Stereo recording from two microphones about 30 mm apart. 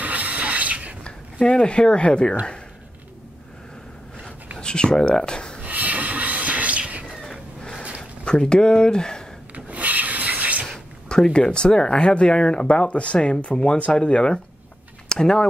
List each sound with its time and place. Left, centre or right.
0.0 s a sound: right
1.0 s speech: left
4.6 s speech: left
5.6 s a sound: right
8.0 s speech: left
9.7 s rub: right
11.1 s speech: left
15.0 s speech: left